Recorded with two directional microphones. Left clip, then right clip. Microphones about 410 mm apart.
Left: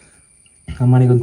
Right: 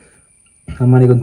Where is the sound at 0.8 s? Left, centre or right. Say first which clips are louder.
Right 5 dB; centre.